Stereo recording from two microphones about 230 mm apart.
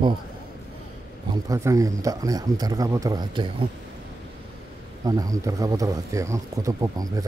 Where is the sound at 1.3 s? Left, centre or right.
Centre.